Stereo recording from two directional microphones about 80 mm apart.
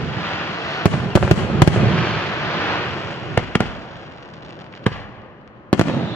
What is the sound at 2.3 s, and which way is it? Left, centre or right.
Waves, left.